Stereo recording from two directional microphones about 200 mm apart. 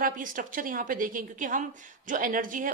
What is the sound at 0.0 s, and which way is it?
A woman's voice, 40° right (ahead or behind).